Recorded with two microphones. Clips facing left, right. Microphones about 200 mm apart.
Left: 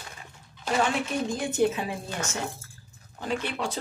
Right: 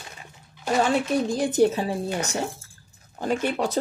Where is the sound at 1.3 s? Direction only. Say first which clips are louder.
Right 4 dB; 35° right (ahead or behind).